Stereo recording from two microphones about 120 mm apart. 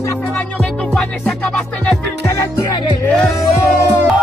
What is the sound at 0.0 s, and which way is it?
Music, 20° left (ahead or behind).